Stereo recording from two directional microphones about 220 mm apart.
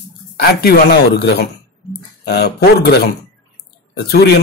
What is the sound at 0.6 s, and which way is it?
A man's voice, 45° left (ahead or behind).